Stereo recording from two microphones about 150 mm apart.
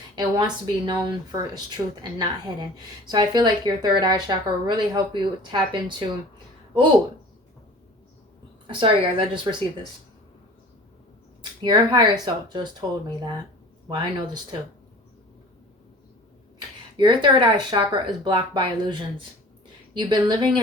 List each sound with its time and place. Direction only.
0.2 s a woman's voice: 30° right (ahead or behind)
8.6 s a woman's voice: 35° right (ahead or behind)
11.6 s speech: 30° right (ahead or behind)
13.8 s speech: 30° right (ahead or behind)
17.0 s a woman's voice: 35° right (ahead or behind)